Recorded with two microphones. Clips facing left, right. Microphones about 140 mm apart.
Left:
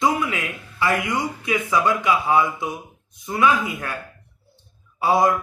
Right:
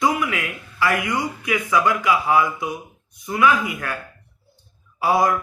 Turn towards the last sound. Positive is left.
turn(degrees=20)  # may be behind; listen again after turning